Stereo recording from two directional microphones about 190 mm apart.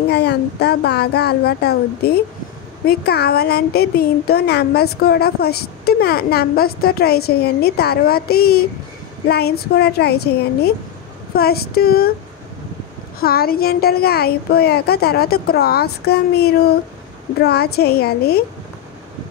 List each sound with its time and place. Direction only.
0.1 s speech: 60° left (ahead or behind)
13.2 s speech: 55° left (ahead or behind)